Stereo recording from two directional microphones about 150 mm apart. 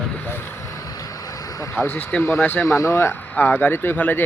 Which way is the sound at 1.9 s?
15° left (ahead or behind).